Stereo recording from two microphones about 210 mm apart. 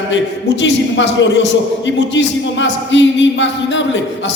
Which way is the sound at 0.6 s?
60° left (ahead or behind).